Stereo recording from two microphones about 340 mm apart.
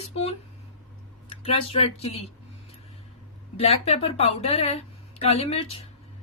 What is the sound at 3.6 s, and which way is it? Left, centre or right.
Speech, centre.